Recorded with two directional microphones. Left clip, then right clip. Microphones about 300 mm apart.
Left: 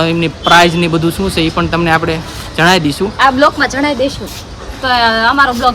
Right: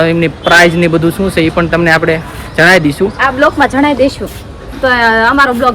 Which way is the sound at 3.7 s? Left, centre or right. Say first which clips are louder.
Right 4 dB; right.